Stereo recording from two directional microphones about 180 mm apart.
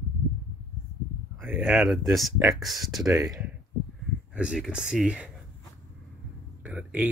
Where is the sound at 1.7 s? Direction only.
Centre (ahead or behind).